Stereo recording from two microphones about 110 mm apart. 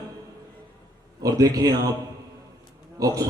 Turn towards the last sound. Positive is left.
turn(degrees=-30)  # may be behind; listen again after turning